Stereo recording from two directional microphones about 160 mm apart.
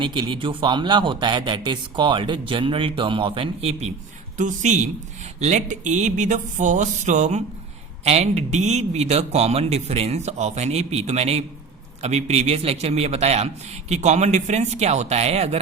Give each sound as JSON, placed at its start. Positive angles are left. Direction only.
{"t": 0.0, "sound": "a man's voice", "side_deg": -30}